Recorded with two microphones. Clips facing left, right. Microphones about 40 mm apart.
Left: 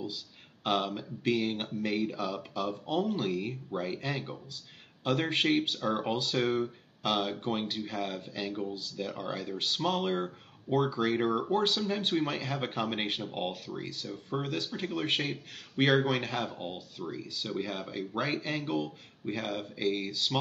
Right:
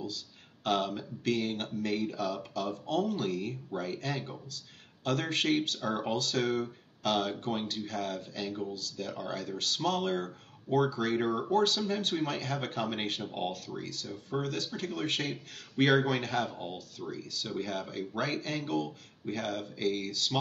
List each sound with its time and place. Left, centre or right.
0.7 s speech: centre